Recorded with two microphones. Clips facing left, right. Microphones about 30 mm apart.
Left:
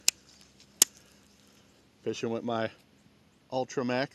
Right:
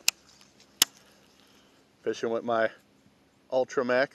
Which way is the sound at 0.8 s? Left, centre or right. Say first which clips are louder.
Right 2 dB; right.